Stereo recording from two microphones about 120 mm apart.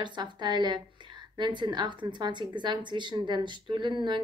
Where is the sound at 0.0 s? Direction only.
40° right (ahead or behind).